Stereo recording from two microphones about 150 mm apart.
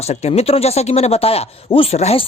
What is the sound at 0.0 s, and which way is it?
Speech, 45° left (ahead or behind).